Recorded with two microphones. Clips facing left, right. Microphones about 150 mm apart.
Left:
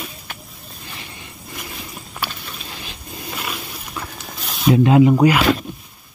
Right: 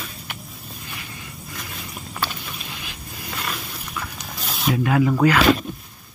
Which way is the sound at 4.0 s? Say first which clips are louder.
Left 1 dB; 30° left (ahead or behind).